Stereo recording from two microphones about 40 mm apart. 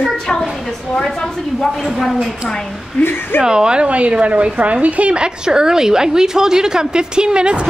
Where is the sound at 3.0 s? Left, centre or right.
Left.